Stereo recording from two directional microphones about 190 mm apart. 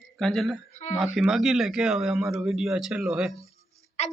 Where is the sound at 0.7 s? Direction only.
40° left (ahead or behind).